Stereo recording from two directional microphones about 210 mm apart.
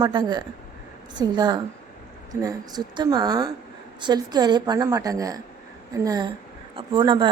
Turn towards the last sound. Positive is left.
turn(degrees=-20)  # may be behind; listen again after turning